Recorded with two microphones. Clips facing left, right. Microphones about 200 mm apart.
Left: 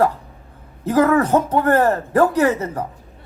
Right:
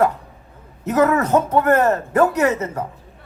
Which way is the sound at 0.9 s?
30° left (ahead or behind).